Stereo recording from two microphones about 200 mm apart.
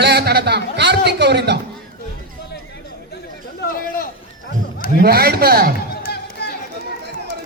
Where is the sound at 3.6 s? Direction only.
45° left (ahead or behind).